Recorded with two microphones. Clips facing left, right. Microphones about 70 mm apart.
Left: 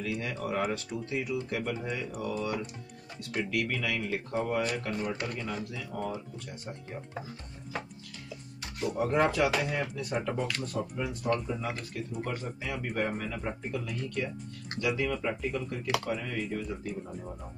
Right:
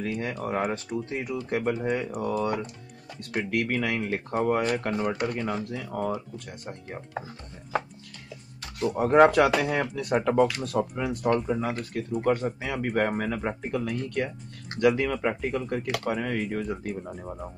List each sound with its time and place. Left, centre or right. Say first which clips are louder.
0.0 s speech: right 4 dB; right
8.9 s speech: right 8 dB; right
9.2 s speech: right 9 dB; right